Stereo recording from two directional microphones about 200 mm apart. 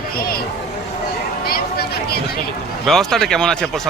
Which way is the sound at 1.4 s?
50° left (ahead or behind).